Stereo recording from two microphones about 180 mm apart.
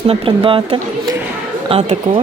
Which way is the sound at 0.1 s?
30° right (ahead or behind).